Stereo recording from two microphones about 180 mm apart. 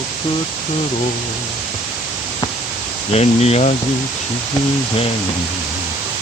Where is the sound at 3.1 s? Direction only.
35° left (ahead or behind).